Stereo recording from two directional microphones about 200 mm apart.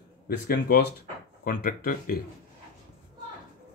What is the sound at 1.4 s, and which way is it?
Speech, 45° left (ahead or behind).